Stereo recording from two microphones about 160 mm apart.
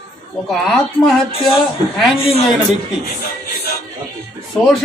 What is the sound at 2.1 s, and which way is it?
Speech, 40° left (ahead or behind).